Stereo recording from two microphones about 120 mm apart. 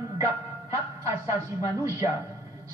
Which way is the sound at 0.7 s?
25° right (ahead or behind).